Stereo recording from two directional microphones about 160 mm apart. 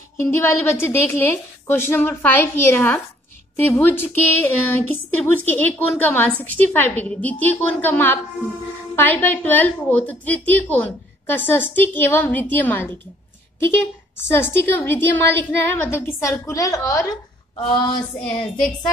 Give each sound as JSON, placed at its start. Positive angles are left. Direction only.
{"t": 0.2, "sound": "a woman's voice", "side_deg": 15}
{"t": 14.6, "sound": "a woman's voice", "side_deg": 15}
{"t": 17.6, "sound": "speech", "side_deg": 30}